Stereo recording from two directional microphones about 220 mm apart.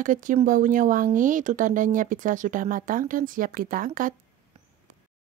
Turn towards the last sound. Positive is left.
turn(degrees=-40)  # may be behind; listen again after turning